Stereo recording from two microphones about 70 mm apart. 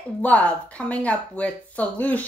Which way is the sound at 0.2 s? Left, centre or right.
Left.